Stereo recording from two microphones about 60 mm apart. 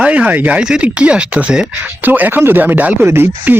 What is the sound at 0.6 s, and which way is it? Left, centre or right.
Speech, centre.